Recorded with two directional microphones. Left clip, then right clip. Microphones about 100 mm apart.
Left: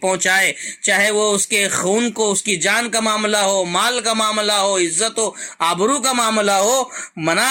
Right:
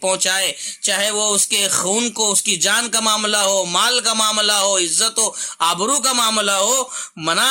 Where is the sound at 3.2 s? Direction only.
15° left (ahead or behind).